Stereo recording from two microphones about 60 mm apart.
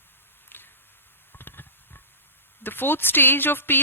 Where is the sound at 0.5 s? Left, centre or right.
Left.